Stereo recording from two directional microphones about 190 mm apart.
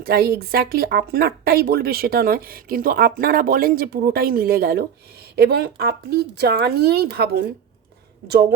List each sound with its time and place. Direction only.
0.0 s speech: 55° right (ahead or behind)